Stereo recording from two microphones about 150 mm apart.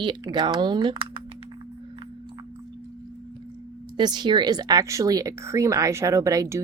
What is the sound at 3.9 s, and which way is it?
A woman's voice, 30° right (ahead or behind).